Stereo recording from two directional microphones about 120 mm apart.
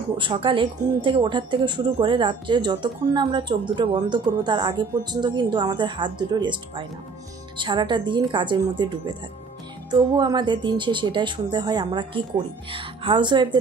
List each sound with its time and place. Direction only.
0.2 s speech: 45° right (ahead or behind)